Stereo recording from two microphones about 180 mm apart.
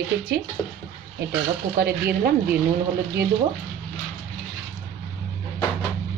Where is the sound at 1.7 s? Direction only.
55° right (ahead or behind).